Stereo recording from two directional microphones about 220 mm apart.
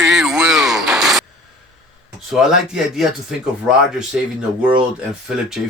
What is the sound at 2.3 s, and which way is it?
Speech, centre (ahead or behind).